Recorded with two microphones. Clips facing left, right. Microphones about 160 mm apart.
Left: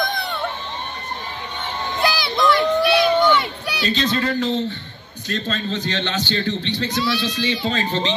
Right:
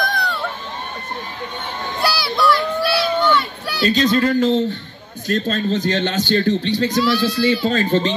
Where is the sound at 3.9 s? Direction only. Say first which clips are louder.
Right 5 dB; 45° right (ahead or behind).